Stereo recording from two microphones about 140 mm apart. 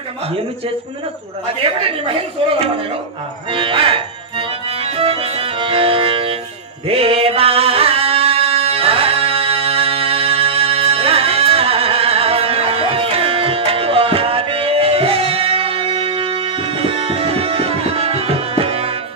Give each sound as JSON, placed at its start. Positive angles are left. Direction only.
{"t": 3.5, "sound": "music", "side_deg": -40}